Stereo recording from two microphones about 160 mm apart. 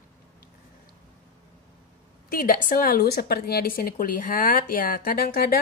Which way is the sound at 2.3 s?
65° left (ahead or behind).